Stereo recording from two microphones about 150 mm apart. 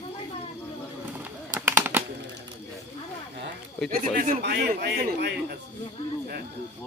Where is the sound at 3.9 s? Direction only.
70° right (ahead or behind); by 5.6 s 90° right.